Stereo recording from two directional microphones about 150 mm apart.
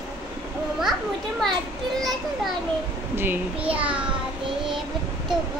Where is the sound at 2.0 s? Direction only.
Centre (ahead or behind).